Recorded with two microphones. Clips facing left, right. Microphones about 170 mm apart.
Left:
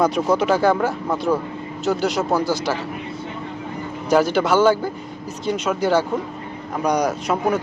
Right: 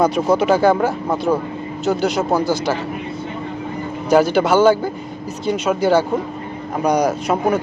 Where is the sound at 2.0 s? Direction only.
Centre (ahead or behind).